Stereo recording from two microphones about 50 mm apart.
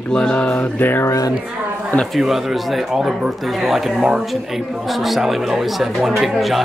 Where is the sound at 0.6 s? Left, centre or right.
Left.